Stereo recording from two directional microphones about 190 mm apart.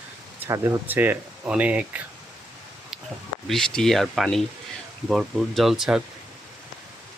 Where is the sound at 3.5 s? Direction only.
5° left (ahead or behind).